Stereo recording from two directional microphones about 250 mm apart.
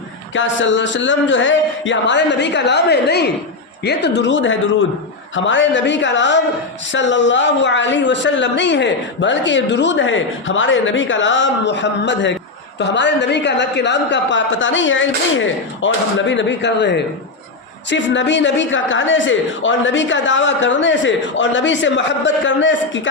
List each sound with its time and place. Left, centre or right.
0.3 s speech: left